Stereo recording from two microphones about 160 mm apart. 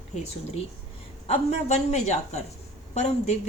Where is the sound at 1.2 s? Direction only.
45° left (ahead or behind).